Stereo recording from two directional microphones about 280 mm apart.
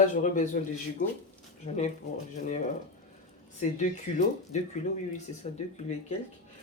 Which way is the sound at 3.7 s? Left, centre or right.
Left.